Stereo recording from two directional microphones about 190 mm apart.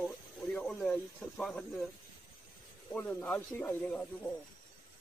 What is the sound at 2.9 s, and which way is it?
Speech, 10° left (ahead or behind).